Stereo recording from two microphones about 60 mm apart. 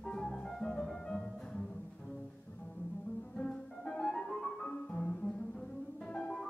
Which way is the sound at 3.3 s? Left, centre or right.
Centre.